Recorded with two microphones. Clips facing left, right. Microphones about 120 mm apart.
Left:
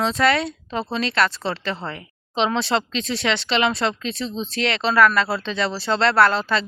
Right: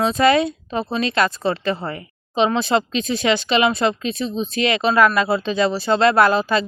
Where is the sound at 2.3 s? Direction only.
5° right (ahead or behind).